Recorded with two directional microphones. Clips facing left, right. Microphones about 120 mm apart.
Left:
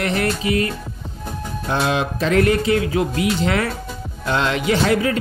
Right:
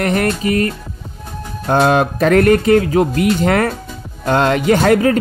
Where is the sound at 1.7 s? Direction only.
50° right (ahead or behind).